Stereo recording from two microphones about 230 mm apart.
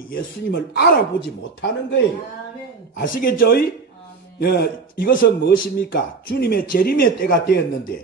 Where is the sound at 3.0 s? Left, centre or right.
Left.